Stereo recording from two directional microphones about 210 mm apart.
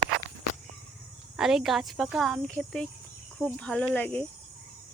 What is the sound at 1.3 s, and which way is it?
Speech, centre (ahead or behind).